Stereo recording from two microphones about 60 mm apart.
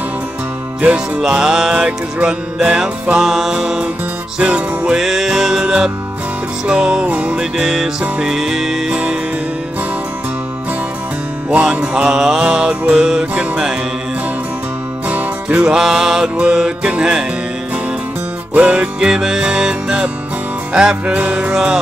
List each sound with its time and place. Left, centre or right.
0.7 s music: centre
4.9 s music: centre
11.9 s music: centre
15.4 s music: centre
18.5 s music: right
18.9 s music: centre